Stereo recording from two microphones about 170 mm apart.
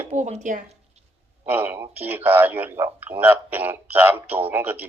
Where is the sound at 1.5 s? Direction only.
10° right (ahead or behind).